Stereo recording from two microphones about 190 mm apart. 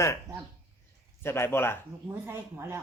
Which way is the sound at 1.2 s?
10° left (ahead or behind).